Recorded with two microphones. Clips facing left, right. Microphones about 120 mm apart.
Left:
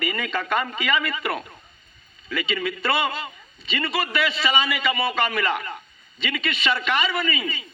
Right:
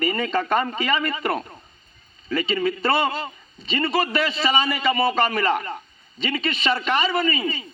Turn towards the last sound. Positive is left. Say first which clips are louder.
# right 4 dB
turn(degrees=-35)  # may be behind; listen again after turning